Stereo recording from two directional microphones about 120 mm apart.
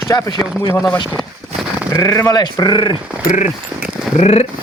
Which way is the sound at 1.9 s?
20° left (ahead or behind).